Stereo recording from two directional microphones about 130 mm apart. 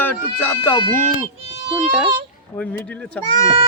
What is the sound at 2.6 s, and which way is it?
Speech, 10° left (ahead or behind).